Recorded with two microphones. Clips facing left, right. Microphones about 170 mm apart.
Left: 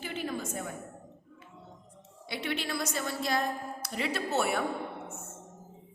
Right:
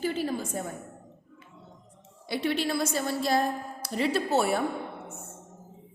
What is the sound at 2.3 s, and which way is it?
A woman's voice, 35° right (ahead or behind).